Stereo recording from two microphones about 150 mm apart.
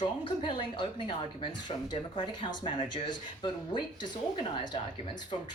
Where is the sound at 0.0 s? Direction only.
30° left (ahead or behind).